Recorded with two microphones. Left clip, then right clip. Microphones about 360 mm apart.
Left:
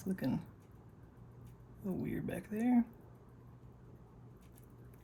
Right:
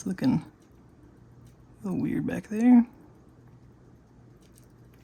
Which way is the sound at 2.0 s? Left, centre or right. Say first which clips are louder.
Right 13 dB; centre.